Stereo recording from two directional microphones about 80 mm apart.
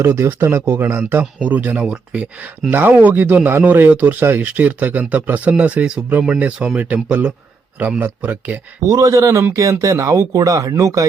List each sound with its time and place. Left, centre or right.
0.0 s speech: right
8.9 s speech: right